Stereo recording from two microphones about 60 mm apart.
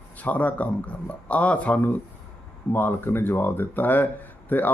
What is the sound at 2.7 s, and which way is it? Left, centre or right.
Speech, left.